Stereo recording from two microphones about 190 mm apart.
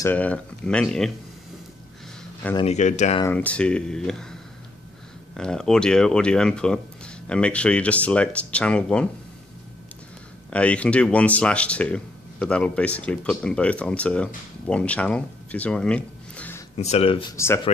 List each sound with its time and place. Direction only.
0.0 s speech: 10° left (ahead or behind)
2.6 s speech: 35° left (ahead or behind)
3.3 s speech: 5° left (ahead or behind)
10.5 s speech: 5° left (ahead or behind)
16.7 s speech: 35° left (ahead or behind)